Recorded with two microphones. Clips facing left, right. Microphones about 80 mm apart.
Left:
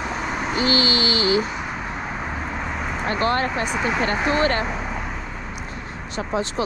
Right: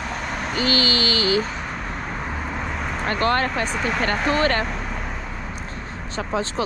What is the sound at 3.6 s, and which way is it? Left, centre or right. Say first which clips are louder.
Speech: left 1 dB; centre.